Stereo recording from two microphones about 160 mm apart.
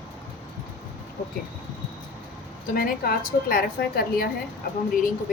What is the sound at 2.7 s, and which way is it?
A woman's voice, 65° left (ahead or behind).